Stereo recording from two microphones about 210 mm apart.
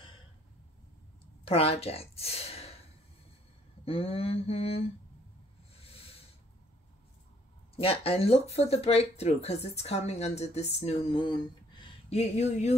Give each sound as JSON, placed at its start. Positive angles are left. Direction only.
{"t": 1.2, "sound": "speech", "side_deg": 25}
{"t": 3.8, "sound": "speech", "side_deg": 25}
{"t": 5.8, "sound": "a sound", "side_deg": 30}
{"t": 7.7, "sound": "speech", "side_deg": 25}